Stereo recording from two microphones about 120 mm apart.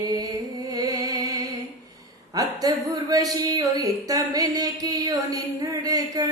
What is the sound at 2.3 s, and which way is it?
Speech, 30° right (ahead or behind).